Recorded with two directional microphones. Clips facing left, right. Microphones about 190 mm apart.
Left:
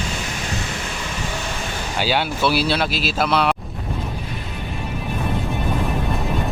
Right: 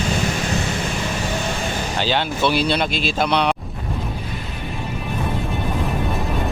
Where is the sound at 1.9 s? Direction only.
10° left (ahead or behind).